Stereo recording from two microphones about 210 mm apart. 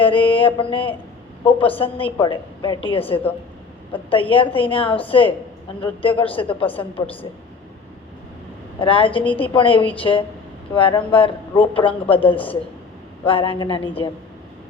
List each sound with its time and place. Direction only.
0.0 s a woman's voice: 25° left (ahead or behind)
8.8 s a woman's voice: 25° left (ahead or behind)